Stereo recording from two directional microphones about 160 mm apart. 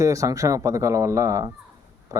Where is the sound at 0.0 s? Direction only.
20° right (ahead or behind).